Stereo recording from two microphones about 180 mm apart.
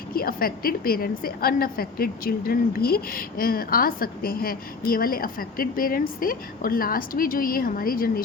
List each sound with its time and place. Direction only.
0.1 s a woman's voice: 55° left (ahead or behind)